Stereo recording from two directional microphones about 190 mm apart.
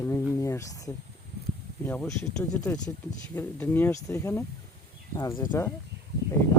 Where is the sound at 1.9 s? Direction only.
10° left (ahead or behind).